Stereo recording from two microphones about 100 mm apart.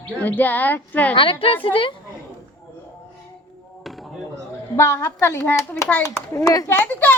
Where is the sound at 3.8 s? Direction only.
Centre (ahead or behind).